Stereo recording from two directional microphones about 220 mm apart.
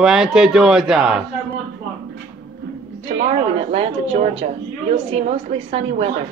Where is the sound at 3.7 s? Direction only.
30° right (ahead or behind).